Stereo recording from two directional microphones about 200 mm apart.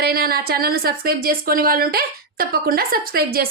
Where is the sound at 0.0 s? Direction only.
50° right (ahead or behind).